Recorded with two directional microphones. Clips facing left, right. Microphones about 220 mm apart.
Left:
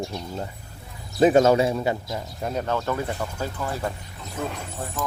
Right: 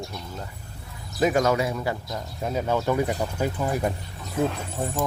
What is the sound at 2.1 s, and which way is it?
Speech, centre (ahead or behind).